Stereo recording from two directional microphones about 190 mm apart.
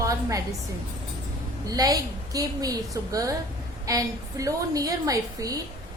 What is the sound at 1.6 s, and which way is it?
A woman's voice, 20° right (ahead or behind).